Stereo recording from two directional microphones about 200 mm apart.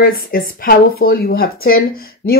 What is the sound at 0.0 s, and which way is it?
Speech, 45° left (ahead or behind).